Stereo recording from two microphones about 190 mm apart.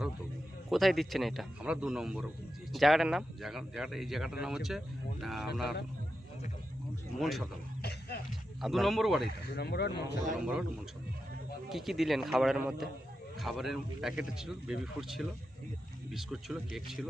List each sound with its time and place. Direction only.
0.7 s a man's voice: centre (ahead or behind)
7.2 s a man's voice: centre (ahead or behind)
9.6 s speech: 60° left (ahead or behind)
11.7 s a man's voice: centre (ahead or behind)